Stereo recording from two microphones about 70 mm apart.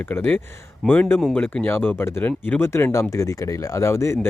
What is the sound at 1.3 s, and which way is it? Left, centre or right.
Speech, centre.